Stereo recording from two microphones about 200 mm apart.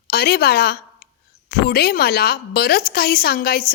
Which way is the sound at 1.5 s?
50° left (ahead or behind).